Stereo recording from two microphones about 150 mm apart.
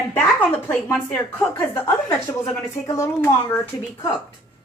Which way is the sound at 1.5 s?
25° left (ahead or behind).